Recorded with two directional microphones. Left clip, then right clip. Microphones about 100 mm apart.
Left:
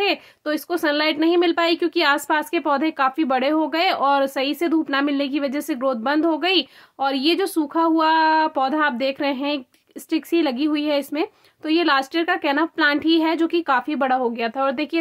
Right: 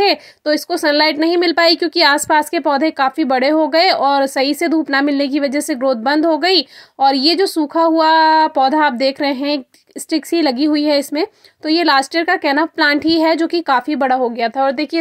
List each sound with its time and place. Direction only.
0.0 s a woman's voice: 50° right (ahead or behind)
1.8 s speech: 45° right (ahead or behind)
4.9 s speech: 55° right (ahead or behind); by 7.8 s 35° right (ahead or behind)
7.8 s speech: 45° right (ahead or behind)
8.7 s speech: 50° right (ahead or behind); by 15.0 s 30° right (ahead or behind)